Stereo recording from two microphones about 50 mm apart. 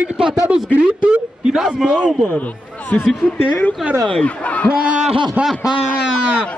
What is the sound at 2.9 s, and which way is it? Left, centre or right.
Speech, left.